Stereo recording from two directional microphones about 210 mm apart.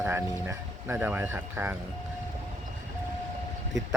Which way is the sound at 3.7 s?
60° right (ahead or behind).